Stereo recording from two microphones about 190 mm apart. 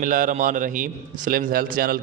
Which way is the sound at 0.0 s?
45° right (ahead or behind).